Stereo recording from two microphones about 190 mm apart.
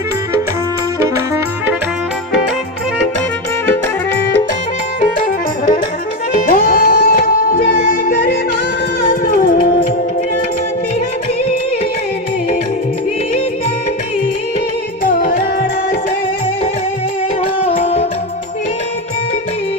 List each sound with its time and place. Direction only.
4.9 s music: 45° left (ahead or behind)
15.0 s music: 45° left (ahead or behind)
17.7 s music: 35° left (ahead or behind)